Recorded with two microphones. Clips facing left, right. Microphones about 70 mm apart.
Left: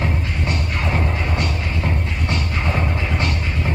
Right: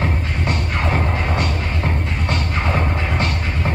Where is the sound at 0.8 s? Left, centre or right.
Right.